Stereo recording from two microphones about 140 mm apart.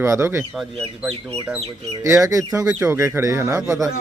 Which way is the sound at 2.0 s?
20° right (ahead or behind).